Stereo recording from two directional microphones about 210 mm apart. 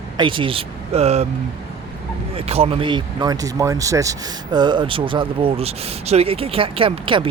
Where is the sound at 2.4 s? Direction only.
30° right (ahead or behind).